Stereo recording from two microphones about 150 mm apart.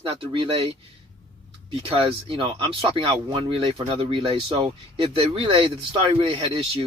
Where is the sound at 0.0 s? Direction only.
35° right (ahead or behind).